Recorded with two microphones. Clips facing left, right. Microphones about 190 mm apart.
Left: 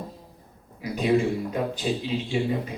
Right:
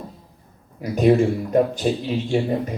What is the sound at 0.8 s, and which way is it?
Speech, 50° right (ahead or behind).